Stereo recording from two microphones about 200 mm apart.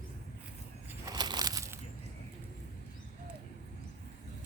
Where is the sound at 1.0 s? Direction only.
20° right (ahead or behind).